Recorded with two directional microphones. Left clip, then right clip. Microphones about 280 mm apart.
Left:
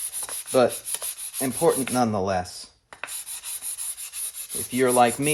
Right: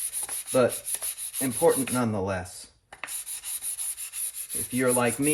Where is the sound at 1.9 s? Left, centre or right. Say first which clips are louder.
Left 5 dB; left.